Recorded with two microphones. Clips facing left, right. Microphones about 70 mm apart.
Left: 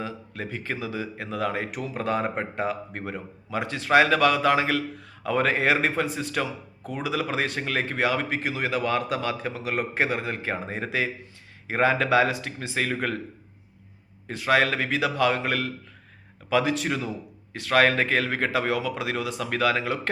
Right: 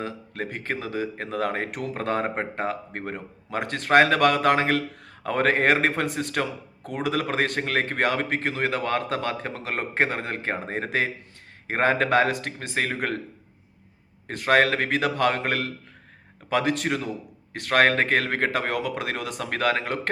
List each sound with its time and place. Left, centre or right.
0.0 s speech: right
14.3 s speech: right